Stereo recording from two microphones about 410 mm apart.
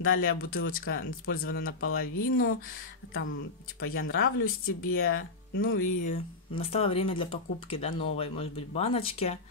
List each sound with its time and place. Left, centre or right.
0.0 s speech: left
3.8 s speech: left